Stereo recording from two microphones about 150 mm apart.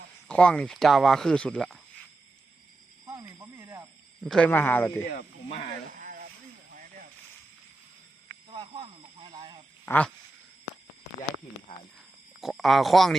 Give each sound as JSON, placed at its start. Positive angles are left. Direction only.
{"t": 0.3, "sound": "speech", "side_deg": 5}
{"t": 3.1, "sound": "snake", "side_deg": -25}
{"t": 4.2, "sound": "speech", "side_deg": 5}
{"t": 6.0, "sound": "a sound", "side_deg": -70}
{"t": 8.4, "sound": "snake", "side_deg": -35}
{"t": 9.8, "sound": "speech", "side_deg": 10}
{"t": 12.4, "sound": "speech", "side_deg": 0}